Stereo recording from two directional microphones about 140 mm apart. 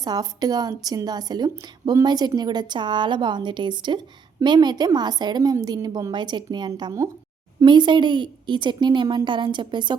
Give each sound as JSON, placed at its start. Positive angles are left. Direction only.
{"t": 0.0, "sound": "a woman's voice", "side_deg": -30}